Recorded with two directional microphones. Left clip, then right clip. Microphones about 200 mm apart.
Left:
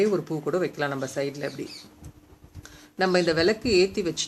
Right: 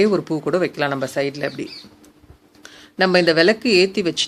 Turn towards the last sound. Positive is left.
turn(degrees=-30)  # may be behind; listen again after turning